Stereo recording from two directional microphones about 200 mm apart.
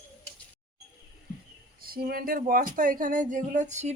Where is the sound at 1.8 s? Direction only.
45° right (ahead or behind).